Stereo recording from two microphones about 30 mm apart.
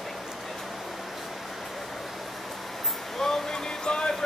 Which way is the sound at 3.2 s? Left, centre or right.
Centre.